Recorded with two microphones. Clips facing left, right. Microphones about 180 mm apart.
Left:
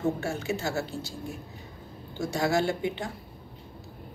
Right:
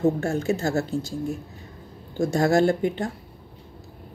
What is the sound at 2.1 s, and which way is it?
Speech, 50° right (ahead or behind).